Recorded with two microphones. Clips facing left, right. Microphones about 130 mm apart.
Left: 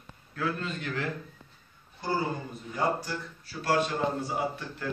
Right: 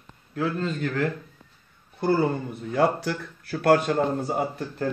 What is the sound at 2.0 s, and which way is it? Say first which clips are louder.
Speech: right 8 dB; 60° right (ahead or behind).